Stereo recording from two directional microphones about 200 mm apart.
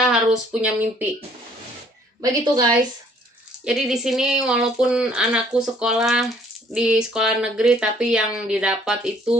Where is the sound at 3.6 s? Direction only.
5° right (ahead or behind).